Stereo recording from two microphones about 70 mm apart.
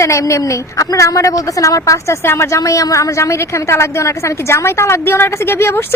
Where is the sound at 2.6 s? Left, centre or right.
Left.